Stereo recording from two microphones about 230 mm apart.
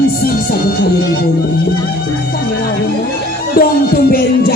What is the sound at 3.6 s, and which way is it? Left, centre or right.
Music, left.